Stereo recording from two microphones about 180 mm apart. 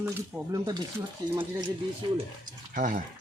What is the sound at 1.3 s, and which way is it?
Speech, 25° right (ahead or behind).